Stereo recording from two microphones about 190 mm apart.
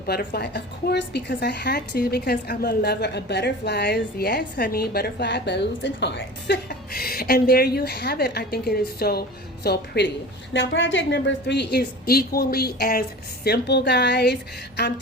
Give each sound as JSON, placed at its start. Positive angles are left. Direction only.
{"t": 0.1, "sound": "a woman's voice", "side_deg": 55}
{"t": 10.5, "sound": "a woman's voice", "side_deg": 80}